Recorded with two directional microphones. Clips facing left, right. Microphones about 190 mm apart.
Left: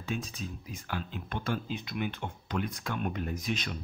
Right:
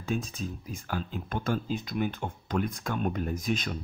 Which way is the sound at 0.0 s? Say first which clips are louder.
Right 4 dB; 45° right (ahead or behind).